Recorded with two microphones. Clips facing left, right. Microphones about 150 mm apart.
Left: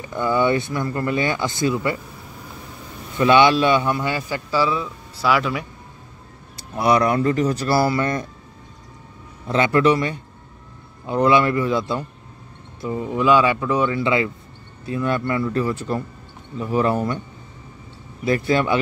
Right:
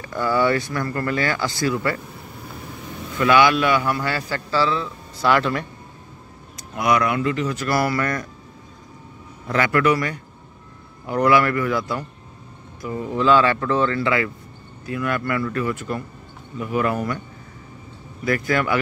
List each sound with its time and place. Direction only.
0.0 s speech: 20° left (ahead or behind)
3.2 s a man's voice: 25° left (ahead or behind); by 5.7 s 5° left (ahead or behind)
6.5 s speech: 30° left (ahead or behind)
9.5 s a man's voice: 25° left (ahead or behind)
18.2 s speech: 25° left (ahead or behind)